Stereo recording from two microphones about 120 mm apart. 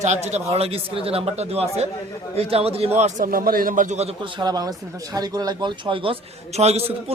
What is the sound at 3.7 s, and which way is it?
Speech, 85° right.